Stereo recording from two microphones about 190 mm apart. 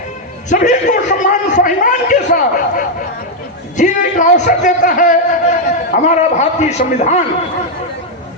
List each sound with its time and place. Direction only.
0.5 s a man's voice: 40° left (ahead or behind)